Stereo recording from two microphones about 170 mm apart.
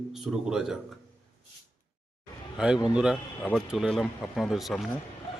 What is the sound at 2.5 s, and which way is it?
A man's voice, 5° right (ahead or behind).